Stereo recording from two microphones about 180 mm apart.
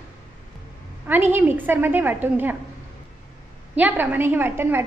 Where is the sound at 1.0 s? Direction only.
10° right (ahead or behind).